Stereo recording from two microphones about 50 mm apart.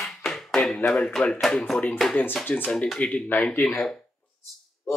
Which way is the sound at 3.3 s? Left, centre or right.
Left.